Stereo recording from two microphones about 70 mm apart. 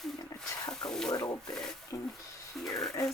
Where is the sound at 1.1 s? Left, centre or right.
Left.